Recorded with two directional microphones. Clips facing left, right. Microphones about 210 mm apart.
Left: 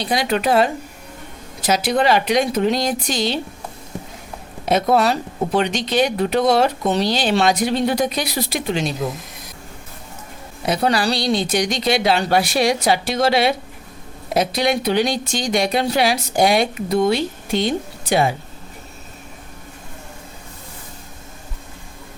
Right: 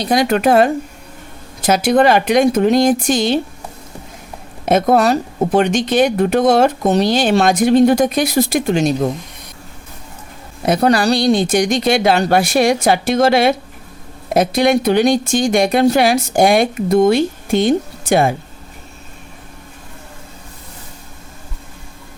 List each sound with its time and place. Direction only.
0.0 s speech: 45° right (ahead or behind)
4.6 s speech: 50° right (ahead or behind)
10.7 s speech: 45° right (ahead or behind)